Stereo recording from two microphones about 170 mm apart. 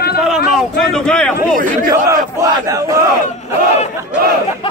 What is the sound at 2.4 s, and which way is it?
Speech, 20° right (ahead or behind).